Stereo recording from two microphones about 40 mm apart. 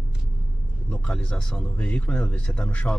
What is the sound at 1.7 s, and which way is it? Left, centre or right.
Speech, left.